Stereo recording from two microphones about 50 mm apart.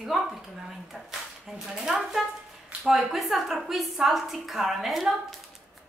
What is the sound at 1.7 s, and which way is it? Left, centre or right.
A woman's voice, centre.